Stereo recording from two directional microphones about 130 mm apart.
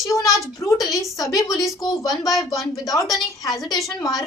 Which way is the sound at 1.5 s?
Centre (ahead or behind).